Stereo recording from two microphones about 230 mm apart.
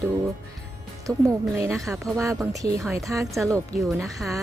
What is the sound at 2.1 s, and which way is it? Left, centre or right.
Speech, centre.